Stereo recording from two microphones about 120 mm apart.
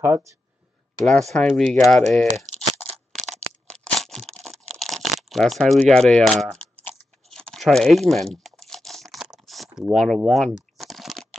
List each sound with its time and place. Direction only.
0.0 s speech: 25° right (ahead or behind)
1.0 s speech: 5° left (ahead or behind)
3.7 s tearing: 5° left (ahead or behind)
7.2 s crumpling: centre (ahead or behind)